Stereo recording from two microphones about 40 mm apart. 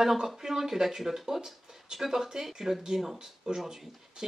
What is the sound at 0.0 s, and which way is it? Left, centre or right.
Speech, centre.